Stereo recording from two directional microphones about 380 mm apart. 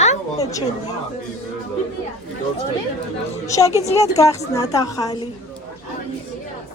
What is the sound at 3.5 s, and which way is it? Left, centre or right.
A woman's voice, centre.